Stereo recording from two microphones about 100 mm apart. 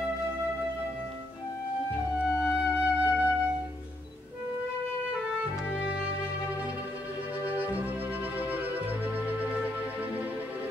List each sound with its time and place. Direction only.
2.1 s flute: 10° right (ahead or behind)
7.4 s music: 15° right (ahead or behind)